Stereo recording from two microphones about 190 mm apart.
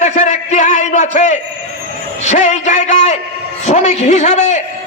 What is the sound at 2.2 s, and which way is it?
A man's voice, 40° left (ahead or behind).